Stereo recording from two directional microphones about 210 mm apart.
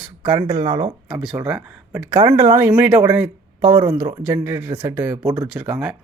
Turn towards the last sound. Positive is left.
turn(degrees=-5)  # may be behind; listen again after turning